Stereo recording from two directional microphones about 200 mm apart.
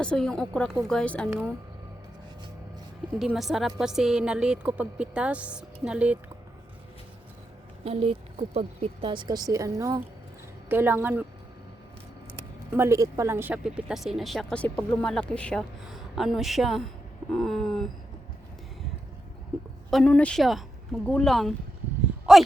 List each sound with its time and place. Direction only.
0.0 s speech: 5° left (ahead or behind)
3.2 s speech: centre (ahead or behind)
7.9 s a woman's voice: 30° right (ahead or behind); by 11.3 s 10° right (ahead or behind)
12.7 s speech: 15° right (ahead or behind)
19.9 s speech: 5° left (ahead or behind)
22.3 s a sound: 5° right (ahead or behind)